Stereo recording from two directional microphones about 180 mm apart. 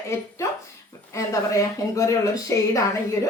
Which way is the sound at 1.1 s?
15° left (ahead or behind).